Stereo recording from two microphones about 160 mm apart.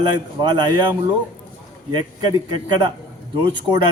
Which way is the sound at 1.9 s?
30° right (ahead or behind).